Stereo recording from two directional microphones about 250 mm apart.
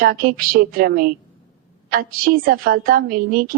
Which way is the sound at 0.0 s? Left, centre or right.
Right.